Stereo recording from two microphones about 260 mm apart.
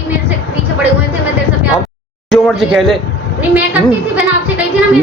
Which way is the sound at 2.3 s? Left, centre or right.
Centre.